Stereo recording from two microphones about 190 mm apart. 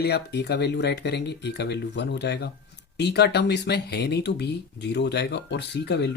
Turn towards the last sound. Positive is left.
turn(degrees=60)  # may be behind; listen again after turning